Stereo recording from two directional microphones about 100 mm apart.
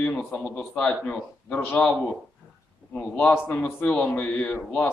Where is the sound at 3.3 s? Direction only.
20° left (ahead or behind).